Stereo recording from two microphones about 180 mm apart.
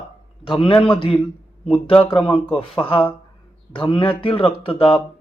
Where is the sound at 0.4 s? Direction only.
25° left (ahead or behind).